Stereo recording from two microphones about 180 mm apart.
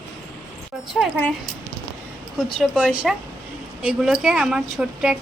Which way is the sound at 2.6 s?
5° left (ahead or behind).